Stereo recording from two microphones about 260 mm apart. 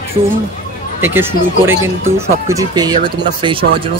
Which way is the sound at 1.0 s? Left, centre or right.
Centre.